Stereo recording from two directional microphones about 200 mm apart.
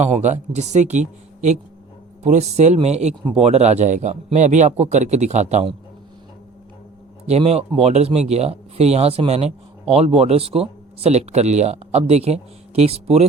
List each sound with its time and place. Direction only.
0.0 s speech: 35° right (ahead or behind)
7.3 s speech: 30° right (ahead or behind)